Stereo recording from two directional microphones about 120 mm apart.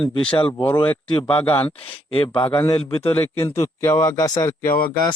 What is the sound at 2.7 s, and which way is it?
Speech, 50° left (ahead or behind).